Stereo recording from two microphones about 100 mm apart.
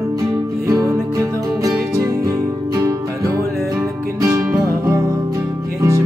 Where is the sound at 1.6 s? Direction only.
35° right (ahead or behind).